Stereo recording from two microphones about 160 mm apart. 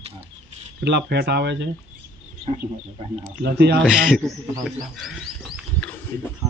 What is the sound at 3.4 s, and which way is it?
Speech, 90° right.